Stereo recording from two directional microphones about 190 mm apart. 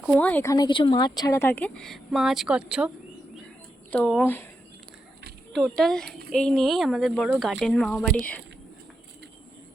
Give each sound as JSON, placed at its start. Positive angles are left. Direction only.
{"t": 0.0, "sound": "speech", "side_deg": 5}
{"t": 3.9, "sound": "speech", "side_deg": 5}
{"t": 5.5, "sound": "speech", "side_deg": 0}
{"t": 6.1, "sound": "speech", "side_deg": -55}
{"t": 6.3, "sound": "speech", "side_deg": 5}